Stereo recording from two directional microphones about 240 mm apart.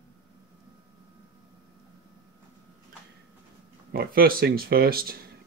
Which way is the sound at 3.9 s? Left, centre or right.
Right.